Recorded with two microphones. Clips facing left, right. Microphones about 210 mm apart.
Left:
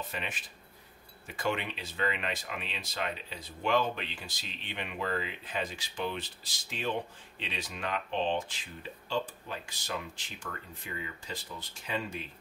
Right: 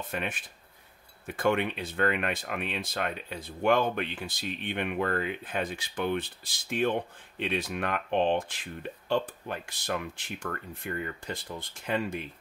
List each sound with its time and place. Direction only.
0.1 s speech: 55° right (ahead or behind)